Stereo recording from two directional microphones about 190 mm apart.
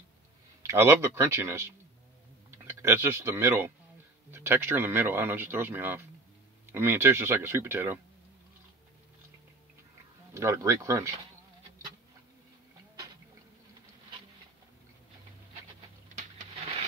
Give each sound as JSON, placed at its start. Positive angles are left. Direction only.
{"t": 0.6, "sound": "speech", "side_deg": -15}
{"t": 10.3, "sound": "speech", "side_deg": -15}